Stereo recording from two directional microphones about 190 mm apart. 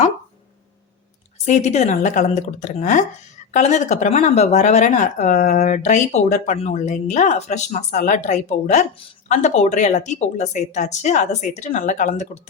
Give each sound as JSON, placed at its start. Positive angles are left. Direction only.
{"t": 1.5, "sound": "speech", "side_deg": 35}